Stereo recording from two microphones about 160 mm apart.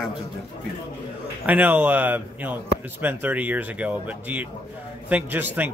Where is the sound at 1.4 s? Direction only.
10° right (ahead or behind).